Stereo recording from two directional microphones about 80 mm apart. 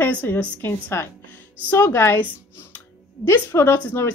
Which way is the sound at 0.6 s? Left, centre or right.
Left.